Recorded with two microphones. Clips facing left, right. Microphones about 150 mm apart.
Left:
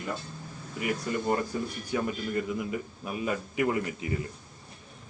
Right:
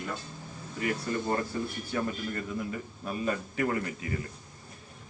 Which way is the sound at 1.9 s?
10° left (ahead or behind).